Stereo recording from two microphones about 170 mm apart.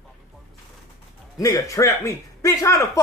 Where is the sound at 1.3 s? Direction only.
20° left (ahead or behind).